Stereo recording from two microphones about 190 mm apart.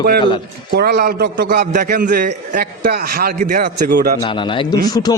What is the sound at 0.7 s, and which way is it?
Speech, 55° right (ahead or behind).